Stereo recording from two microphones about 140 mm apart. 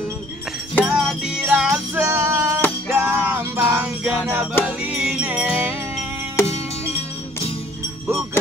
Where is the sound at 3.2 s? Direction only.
10° right (ahead or behind).